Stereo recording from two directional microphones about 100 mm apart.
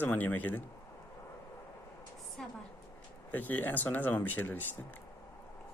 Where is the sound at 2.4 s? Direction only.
10° left (ahead or behind).